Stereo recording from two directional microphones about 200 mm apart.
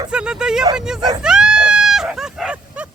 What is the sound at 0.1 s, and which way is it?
Speech, 5° right (ahead or behind).